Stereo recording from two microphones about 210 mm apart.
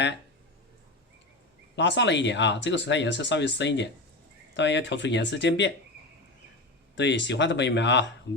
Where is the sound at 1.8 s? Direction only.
60° left (ahead or behind).